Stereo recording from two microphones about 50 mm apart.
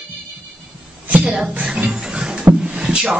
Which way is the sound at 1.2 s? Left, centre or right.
Centre.